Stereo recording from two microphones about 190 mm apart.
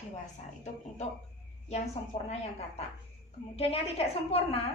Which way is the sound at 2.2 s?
35° left (ahead or behind).